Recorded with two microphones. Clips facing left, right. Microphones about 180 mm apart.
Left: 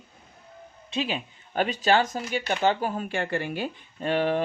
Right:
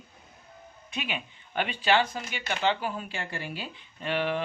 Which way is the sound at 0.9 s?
35° left (ahead or behind).